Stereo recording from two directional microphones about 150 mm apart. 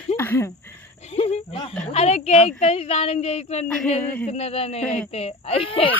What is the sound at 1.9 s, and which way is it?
Speech, 45° left (ahead or behind).